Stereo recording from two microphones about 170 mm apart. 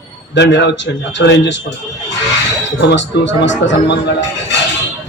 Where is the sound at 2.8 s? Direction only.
90° left.